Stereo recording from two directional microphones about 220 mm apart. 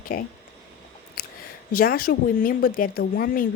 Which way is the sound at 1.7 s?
40° left (ahead or behind).